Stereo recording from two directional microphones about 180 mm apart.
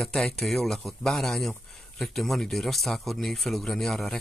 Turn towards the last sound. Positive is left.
turn(degrees=0)  # may be behind; listen again after turning